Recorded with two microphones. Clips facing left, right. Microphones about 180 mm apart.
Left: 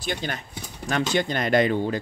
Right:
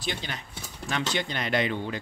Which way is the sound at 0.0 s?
50° left (ahead or behind).